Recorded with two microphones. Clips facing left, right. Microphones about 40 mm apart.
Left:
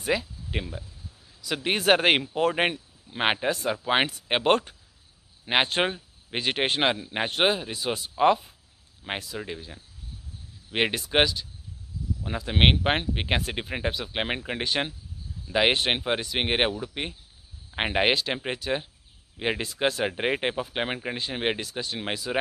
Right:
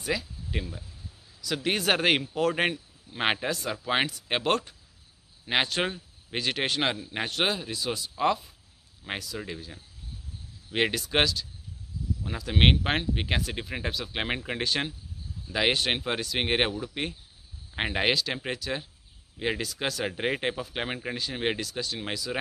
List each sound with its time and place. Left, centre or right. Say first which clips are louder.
0.0 s a man's voice: left 4 dB; left; by 17.2 s centre
17.7 s a man's voice: left 3 dB; left
20.1 s a man's voice: left 2 dB; centre